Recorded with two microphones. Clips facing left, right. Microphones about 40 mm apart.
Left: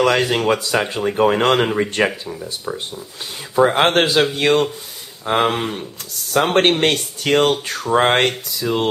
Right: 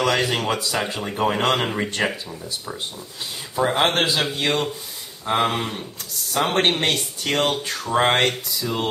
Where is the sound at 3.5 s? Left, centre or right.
Left.